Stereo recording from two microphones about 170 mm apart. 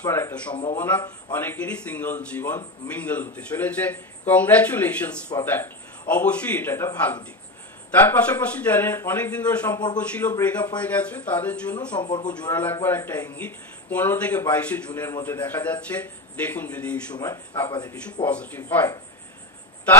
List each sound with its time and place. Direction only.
0.0 s a man's voice: 15° left (ahead or behind)
12.0 s a man's voice: 25° left (ahead or behind)
12.7 s a man's voice: 15° left (ahead or behind)
18.2 s a man's voice: 10° left (ahead or behind)